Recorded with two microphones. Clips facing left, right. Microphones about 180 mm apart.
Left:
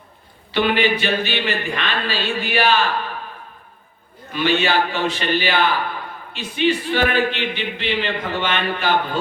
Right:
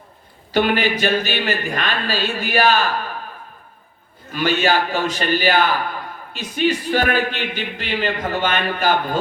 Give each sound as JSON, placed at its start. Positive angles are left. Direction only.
{"t": 0.5, "sound": "a man's voice", "side_deg": -45}
{"t": 4.3, "sound": "a man's voice", "side_deg": -45}